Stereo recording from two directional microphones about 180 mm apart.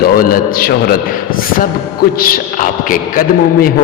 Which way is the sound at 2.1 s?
55° left (ahead or behind).